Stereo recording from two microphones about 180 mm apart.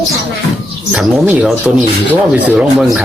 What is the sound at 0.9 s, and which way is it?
Speech, 5° right (ahead or behind).